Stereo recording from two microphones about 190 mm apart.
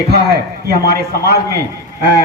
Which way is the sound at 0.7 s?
55° right (ahead or behind).